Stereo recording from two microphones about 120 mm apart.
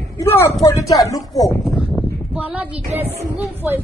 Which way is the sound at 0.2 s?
20° left (ahead or behind).